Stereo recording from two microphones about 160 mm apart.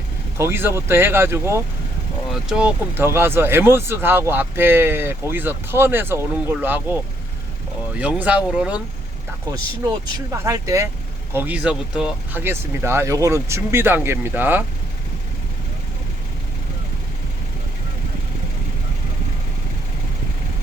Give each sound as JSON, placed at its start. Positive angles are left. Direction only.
{"t": 0.3, "sound": "speech", "side_deg": -15}
{"t": 2.3, "sound": "speech", "side_deg": -5}
{"t": 10.3, "sound": "speech", "side_deg": -20}